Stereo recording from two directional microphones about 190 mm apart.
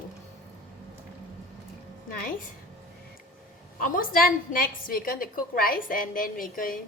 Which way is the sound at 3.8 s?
45° left (ahead or behind).